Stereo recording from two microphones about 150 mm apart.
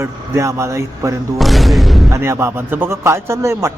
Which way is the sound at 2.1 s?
15° right (ahead or behind).